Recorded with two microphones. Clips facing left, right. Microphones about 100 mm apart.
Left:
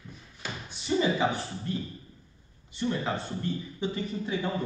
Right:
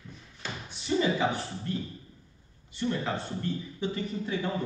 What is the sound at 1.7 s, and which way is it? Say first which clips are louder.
Speech: even; 25° left (ahead or behind).